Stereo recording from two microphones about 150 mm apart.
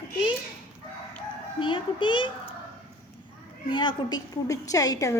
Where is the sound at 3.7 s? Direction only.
30° left (ahead or behind).